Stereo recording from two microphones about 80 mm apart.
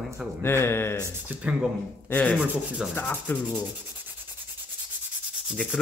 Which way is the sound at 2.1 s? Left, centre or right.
Centre.